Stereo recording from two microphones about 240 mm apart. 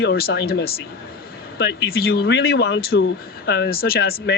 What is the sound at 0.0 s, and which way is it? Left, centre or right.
Speech, left.